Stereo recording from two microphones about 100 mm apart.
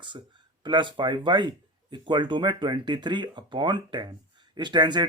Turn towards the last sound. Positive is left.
turn(degrees=-50)  # may be behind; listen again after turning